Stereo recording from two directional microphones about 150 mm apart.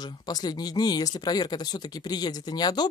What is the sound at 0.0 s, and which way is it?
Speech, 25° left (ahead or behind).